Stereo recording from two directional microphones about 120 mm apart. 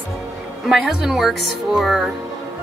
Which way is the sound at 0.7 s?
5° right (ahead or behind).